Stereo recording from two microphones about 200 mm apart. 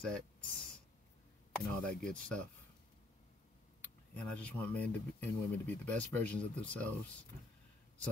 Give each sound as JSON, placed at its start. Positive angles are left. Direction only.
{"t": 0.0, "sound": "a sound", "side_deg": 5}
{"t": 1.7, "sound": "speech", "side_deg": 5}
{"t": 3.8, "sound": "speech", "side_deg": 5}